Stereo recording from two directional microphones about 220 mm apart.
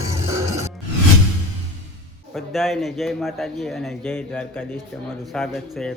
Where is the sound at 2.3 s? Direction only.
Centre (ahead or behind).